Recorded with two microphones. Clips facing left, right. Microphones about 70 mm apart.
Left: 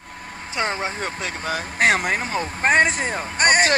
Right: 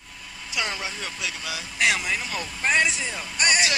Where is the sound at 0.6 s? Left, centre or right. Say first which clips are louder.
Left 6 dB; left.